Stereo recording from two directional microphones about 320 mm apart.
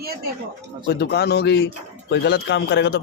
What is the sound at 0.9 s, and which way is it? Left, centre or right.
Speech, left.